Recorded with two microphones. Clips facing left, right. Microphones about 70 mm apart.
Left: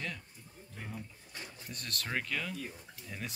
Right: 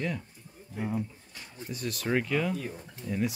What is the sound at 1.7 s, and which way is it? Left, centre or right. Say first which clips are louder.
Speech: right 9 dB; centre.